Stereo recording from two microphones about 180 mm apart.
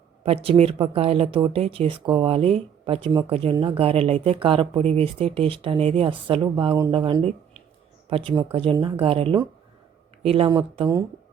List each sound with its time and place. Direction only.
0.4 s speech: 30° right (ahead or behind)